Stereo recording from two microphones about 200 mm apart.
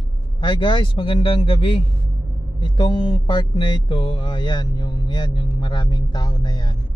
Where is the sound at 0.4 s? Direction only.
25° left (ahead or behind).